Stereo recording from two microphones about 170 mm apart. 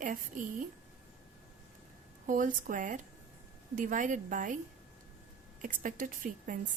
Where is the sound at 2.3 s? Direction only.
50° right (ahead or behind).